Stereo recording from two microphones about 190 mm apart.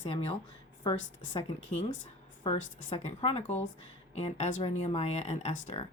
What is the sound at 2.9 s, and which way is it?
Speech, 35° left (ahead or behind).